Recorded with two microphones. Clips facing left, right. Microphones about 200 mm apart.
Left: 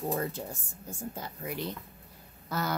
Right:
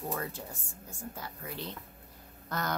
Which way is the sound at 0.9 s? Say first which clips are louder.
Left 4 dB; 20° left (ahead or behind).